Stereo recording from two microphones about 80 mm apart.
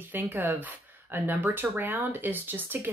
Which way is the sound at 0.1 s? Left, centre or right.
Right.